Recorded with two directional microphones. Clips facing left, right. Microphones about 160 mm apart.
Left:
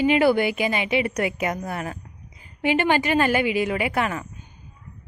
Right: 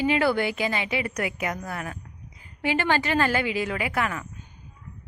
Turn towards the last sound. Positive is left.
turn(degrees=25)  # may be behind; listen again after turning